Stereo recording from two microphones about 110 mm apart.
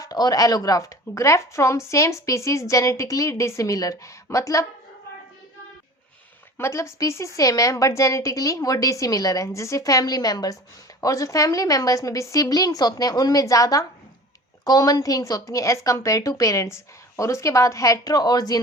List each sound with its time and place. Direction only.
0.0 s speech: 35° left (ahead or behind)
6.6 s a woman's voice: 25° left (ahead or behind)